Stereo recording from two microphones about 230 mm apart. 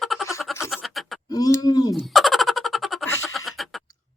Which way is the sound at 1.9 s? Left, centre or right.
Centre.